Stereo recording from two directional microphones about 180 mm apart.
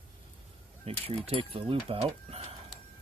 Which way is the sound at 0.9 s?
35° right (ahead or behind).